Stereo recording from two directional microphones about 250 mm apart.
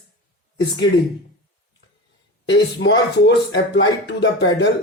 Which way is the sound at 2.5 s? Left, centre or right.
Left.